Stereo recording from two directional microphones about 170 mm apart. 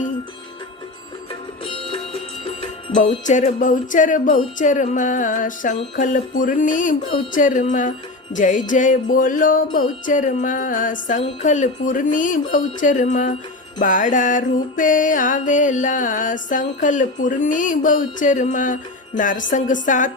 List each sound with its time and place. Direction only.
1.6 s music: 30° left (ahead or behind)
3.2 s music: 45° left (ahead or behind)